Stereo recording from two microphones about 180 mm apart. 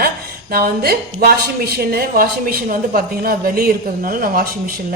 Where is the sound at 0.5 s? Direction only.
55° right (ahead or behind).